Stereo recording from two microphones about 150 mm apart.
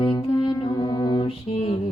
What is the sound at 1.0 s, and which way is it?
Mantra, 25° left (ahead or behind).